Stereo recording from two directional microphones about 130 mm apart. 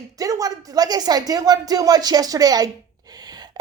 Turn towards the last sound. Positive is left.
turn(degrees=-30)  # may be behind; listen again after turning